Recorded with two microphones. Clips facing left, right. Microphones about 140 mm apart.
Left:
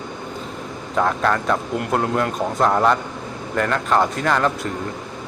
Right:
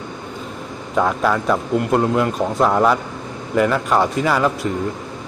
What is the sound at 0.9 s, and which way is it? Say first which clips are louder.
Speech: right 2 dB; 5° right (ahead or behind).